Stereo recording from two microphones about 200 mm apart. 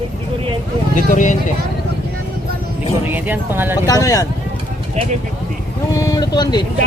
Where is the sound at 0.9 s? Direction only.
40° left (ahead or behind).